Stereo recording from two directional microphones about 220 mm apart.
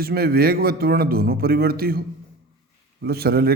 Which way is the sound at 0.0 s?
45° right (ahead or behind).